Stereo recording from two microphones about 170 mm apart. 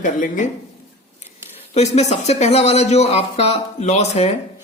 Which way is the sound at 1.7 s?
40° left (ahead or behind).